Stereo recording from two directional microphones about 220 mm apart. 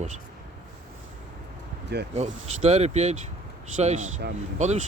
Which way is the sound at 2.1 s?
30° right (ahead or behind).